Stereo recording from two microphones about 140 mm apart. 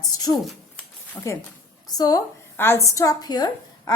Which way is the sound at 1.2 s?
10° left (ahead or behind).